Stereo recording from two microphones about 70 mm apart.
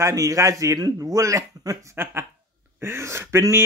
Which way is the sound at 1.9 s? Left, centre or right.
Right.